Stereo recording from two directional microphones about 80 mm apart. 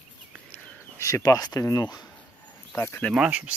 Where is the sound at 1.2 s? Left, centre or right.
Left.